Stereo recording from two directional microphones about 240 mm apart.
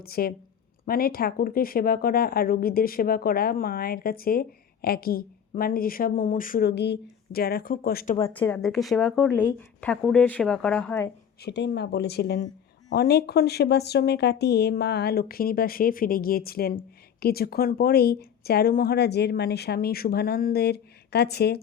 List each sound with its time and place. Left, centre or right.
0.0 s speech: left
8.2 s speech: centre
11.3 s speech: left